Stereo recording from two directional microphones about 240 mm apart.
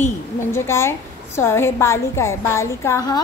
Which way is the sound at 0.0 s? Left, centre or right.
Centre.